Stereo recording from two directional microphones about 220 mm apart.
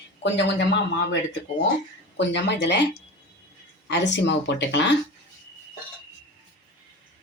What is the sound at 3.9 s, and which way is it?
Speech, 55° left (ahead or behind).